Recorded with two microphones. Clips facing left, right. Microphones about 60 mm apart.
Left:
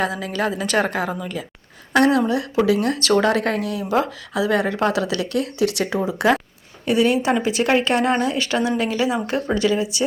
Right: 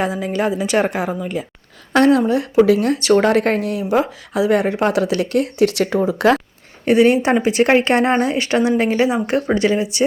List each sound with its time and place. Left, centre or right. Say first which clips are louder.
0.0 s speech: right 3 dB; right
1.9 s speech: right 3 dB; right
5.7 s speech: right 5 dB; right
6.8 s speech: right 5 dB; right